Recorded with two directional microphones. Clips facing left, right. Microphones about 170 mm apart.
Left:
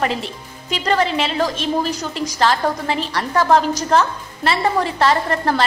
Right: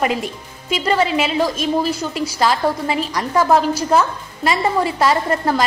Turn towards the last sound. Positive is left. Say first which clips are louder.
# right 1 dB
turn(degrees=-10)  # may be behind; listen again after turning